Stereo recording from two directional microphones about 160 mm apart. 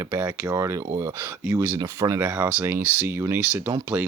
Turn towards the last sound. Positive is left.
turn(degrees=-10)  # may be behind; listen again after turning